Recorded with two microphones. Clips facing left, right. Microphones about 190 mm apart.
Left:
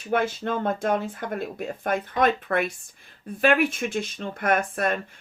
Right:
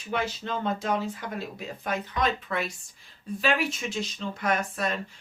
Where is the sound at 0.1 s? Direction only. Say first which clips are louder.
Left 5 dB; 55° left (ahead or behind).